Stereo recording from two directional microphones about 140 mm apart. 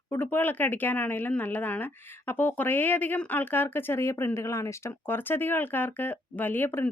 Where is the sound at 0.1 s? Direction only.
15° left (ahead or behind).